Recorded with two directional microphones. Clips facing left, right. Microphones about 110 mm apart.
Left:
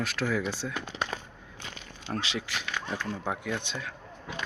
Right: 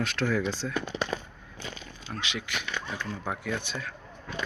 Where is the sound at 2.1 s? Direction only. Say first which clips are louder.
Left 1 dB; 35° left (ahead or behind).